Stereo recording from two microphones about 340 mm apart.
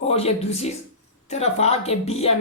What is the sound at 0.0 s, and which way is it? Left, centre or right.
Speech, centre.